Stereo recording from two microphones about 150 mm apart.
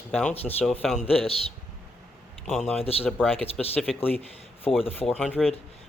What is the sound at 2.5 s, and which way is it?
Speech, centre (ahead or behind).